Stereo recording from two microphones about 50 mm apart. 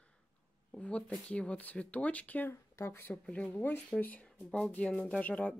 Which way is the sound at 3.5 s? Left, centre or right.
Left.